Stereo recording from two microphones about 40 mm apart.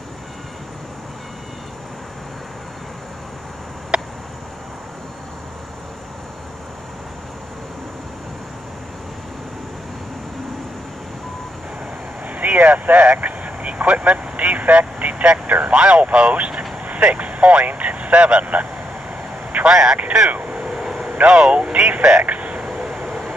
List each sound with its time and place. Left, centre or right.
3.9 s a sound: right
12.3 s vehicle: right
15.6 s speech: right
19.7 s speech: centre
20.2 s vehicle: right
21.3 s speech: right
22.8 s vehicle: centre